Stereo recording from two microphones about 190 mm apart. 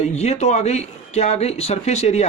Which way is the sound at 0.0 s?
35° left (ahead or behind).